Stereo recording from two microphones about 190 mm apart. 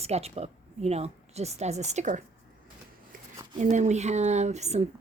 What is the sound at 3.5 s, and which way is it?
Speech, 40° right (ahead or behind).